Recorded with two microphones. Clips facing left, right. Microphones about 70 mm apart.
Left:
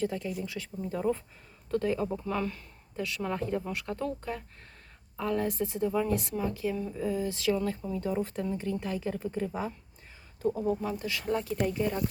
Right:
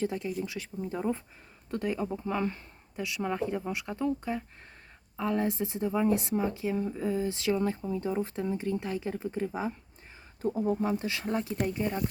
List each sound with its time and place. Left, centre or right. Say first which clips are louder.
0.0 s speech: right 1 dB; right